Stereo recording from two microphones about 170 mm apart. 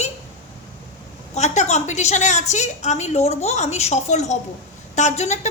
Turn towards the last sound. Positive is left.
turn(degrees=45)  # may be behind; listen again after turning